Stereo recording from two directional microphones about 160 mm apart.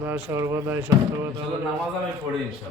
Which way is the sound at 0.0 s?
15° right (ahead or behind).